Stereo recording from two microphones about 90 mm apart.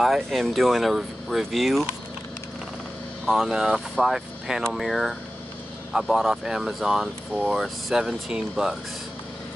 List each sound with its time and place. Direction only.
0.0 s speech: centre (ahead or behind)
3.3 s speech: centre (ahead or behind)